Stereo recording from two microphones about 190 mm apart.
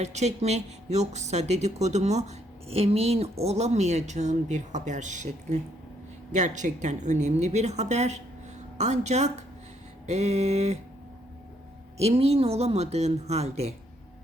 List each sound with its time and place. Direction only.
0.0 s speech: 35° right (ahead or behind)
11.9 s speech: 35° right (ahead or behind)